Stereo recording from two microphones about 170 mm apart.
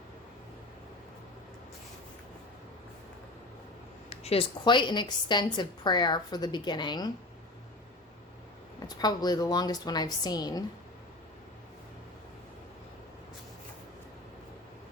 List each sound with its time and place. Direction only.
4.1 s a woman's voice: 35° left (ahead or behind)
8.8 s a woman's voice: 25° left (ahead or behind)